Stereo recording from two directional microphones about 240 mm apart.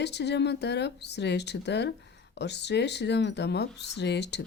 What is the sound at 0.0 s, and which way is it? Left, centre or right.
Speech, left.